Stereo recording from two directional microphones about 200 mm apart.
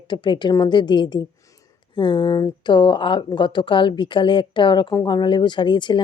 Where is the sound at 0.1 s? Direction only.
20° left (ahead or behind).